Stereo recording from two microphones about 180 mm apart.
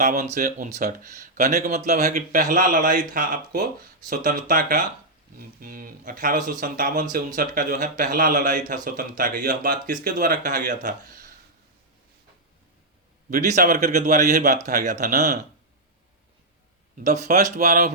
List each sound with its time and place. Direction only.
0.0 s speech: 45° right (ahead or behind)
13.3 s speech: 45° right (ahead or behind)
17.0 s speech: 40° right (ahead or behind)